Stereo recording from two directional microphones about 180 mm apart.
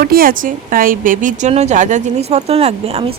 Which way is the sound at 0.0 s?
55° right (ahead or behind).